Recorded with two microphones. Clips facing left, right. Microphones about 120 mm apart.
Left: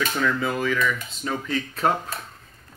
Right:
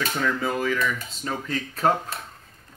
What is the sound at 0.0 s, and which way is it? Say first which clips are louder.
Speech: left 1 dB; 40° right (ahead or behind).